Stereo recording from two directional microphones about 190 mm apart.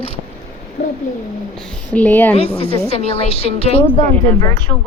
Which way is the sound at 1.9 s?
10° left (ahead or behind).